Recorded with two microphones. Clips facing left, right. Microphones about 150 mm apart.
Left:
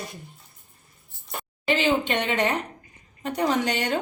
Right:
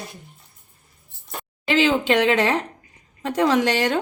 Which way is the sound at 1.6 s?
90° right.